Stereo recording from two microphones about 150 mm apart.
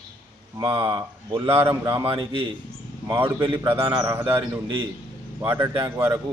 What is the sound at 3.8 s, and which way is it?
Speech, 25° right (ahead or behind).